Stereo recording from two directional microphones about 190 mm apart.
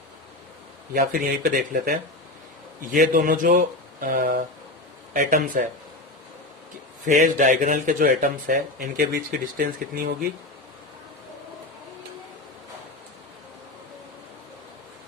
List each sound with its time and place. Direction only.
0.9 s a man's voice: 50° right (ahead or behind)
7.0 s a man's voice: 40° right (ahead or behind)